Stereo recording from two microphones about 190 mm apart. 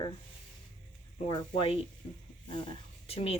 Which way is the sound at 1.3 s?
25° left (ahead or behind).